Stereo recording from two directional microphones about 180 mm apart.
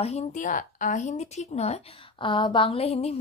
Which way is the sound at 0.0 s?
40° left (ahead or behind).